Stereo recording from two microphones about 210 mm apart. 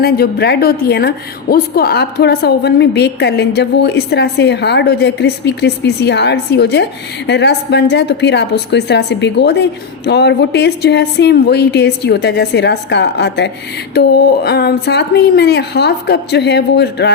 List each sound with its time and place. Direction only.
0.0 s a woman's voice: 50° left (ahead or behind)